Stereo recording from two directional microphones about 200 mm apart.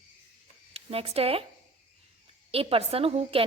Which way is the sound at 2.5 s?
30° right (ahead or behind).